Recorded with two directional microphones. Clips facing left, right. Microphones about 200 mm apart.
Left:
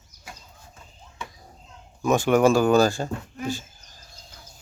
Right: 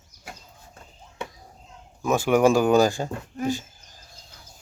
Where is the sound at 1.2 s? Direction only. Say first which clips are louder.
Right 4 dB; 65° right (ahead or behind).